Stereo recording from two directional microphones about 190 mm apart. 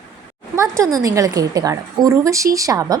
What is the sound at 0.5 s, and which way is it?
A woman's voice, 15° right (ahead or behind).